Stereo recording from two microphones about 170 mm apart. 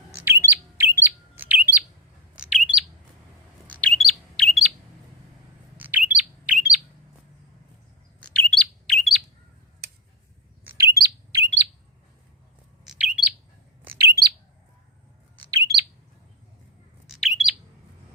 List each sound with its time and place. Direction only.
0.2 s bird: 15° right (ahead or behind)
3.7 s bird: 5° left (ahead or behind)
5.7 s bird: 10° right (ahead or behind)
8.2 s bird: 5° left (ahead or behind)
10.6 s chirp: 15° right (ahead or behind)
12.8 s bird: 5° right (ahead or behind)
13.8 s bird: 15° right (ahead or behind)
17.1 s bird: centre (ahead or behind)